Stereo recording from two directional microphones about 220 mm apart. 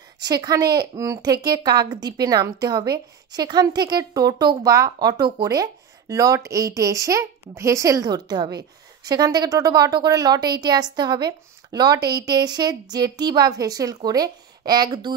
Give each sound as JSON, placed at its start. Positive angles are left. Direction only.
{"t": 0.2, "sound": "speech", "side_deg": -15}